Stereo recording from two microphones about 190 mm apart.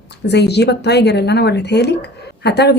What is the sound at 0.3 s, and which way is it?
Speech, 60° left (ahead or behind).